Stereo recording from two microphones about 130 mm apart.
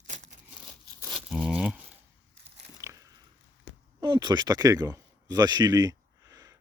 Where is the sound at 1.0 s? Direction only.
Centre (ahead or behind).